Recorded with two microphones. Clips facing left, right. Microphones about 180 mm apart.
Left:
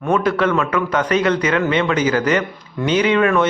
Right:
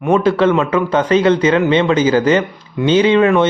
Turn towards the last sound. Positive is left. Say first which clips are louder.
# right 4 dB
turn(degrees=-25)  # may be behind; listen again after turning